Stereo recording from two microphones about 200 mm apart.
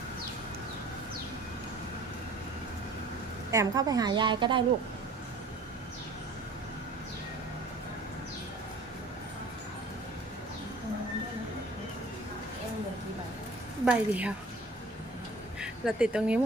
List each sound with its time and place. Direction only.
3.5 s a woman's voice: 15° right (ahead or behind)
13.8 s a woman's voice: 5° right (ahead or behind)
15.6 s speech: 5° right (ahead or behind)